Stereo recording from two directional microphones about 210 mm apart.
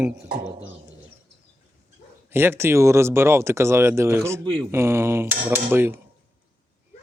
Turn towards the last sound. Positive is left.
turn(degrees=-10)  # may be behind; listen again after turning